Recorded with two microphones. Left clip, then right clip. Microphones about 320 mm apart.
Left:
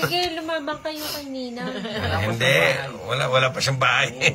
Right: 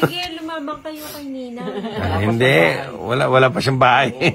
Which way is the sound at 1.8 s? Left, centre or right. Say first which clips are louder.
Right 4 dB; centre.